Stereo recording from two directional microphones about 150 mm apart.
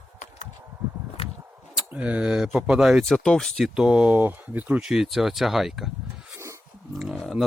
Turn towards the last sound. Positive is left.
turn(degrees=0)  # may be behind; listen again after turning